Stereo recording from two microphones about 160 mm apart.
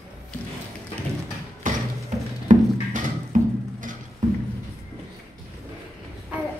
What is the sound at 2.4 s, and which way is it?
Music, 50° right (ahead or behind).